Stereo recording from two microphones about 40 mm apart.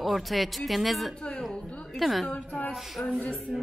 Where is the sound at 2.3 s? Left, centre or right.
Left.